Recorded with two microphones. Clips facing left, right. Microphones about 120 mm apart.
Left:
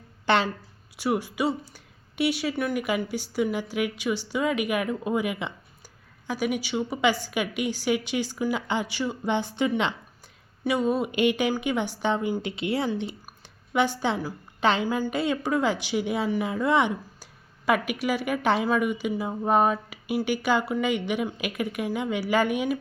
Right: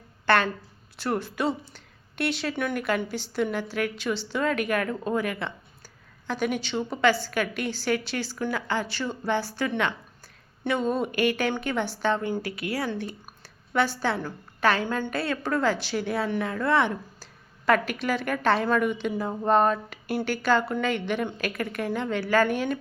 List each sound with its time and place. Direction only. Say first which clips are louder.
0.3 s speech: even; 20° left (ahead or behind)
10.6 s speech: left 1 dB; 10° left (ahead or behind)
11.1 s a woman's voice: left 2 dB; 20° left (ahead or behind)